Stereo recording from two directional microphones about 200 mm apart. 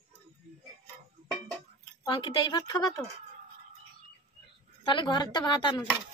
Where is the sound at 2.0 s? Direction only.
25° left (ahead or behind).